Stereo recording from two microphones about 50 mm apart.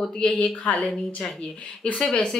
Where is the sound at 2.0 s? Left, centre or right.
Centre.